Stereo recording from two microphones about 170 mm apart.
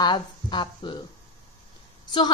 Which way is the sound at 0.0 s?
25° left (ahead or behind).